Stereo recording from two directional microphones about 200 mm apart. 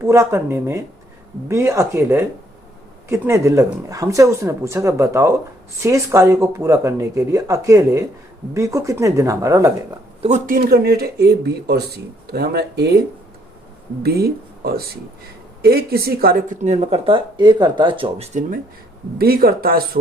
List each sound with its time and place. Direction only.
0.0 s speech: 15° right (ahead or behind)
10.2 s speech: 40° right (ahead or behind); by 13.0 s 55° right (ahead or behind)
14.0 s speech: 50° right (ahead or behind); by 18.4 s 30° right (ahead or behind)
19.2 s speech: 50° right (ahead or behind)